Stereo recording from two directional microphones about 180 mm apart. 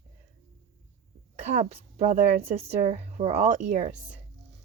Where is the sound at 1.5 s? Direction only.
35° right (ahead or behind).